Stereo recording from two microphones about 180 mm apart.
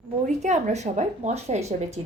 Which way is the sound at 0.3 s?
40° right (ahead or behind).